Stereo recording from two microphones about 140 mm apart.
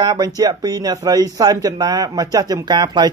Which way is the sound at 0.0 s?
25° right (ahead or behind).